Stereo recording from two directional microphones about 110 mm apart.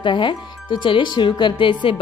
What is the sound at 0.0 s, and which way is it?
Speech, 50° left (ahead or behind).